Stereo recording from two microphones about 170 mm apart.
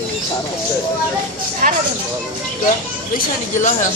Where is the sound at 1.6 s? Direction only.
50° right (ahead or behind).